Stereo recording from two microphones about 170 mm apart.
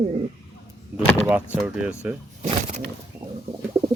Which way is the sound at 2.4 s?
40° right (ahead or behind).